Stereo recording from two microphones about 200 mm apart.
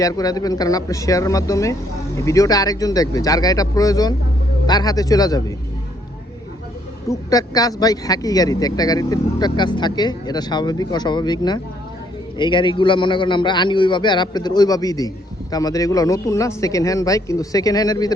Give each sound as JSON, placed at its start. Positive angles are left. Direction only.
{"t": 0.0, "sound": "a man's voice", "side_deg": 20}
{"t": 7.1, "sound": "a man's voice", "side_deg": 20}